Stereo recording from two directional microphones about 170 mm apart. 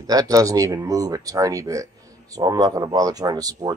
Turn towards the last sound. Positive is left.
turn(degrees=-20)  # may be behind; listen again after turning